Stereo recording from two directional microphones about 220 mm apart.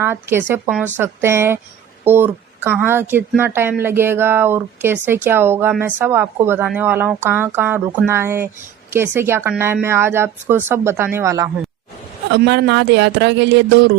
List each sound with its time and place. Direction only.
0.0 s speech: 10° right (ahead or behind)
12.3 s speech: 50° right (ahead or behind)